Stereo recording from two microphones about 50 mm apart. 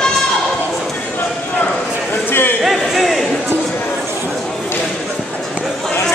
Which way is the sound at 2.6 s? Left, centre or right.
Centre.